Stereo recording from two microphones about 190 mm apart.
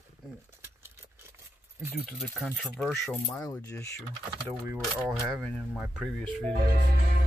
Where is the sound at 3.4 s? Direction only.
15° left (ahead or behind).